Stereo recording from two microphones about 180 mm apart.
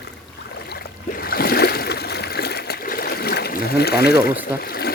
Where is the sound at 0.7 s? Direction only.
60° left (ahead or behind).